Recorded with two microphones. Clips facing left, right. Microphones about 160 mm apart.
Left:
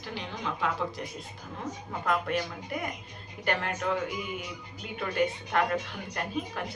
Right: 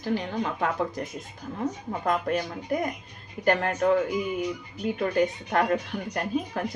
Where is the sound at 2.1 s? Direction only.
40° right (ahead or behind).